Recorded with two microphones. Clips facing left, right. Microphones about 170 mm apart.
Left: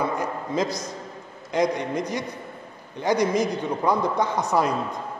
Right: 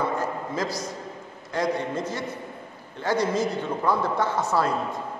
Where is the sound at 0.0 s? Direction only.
20° left (ahead or behind).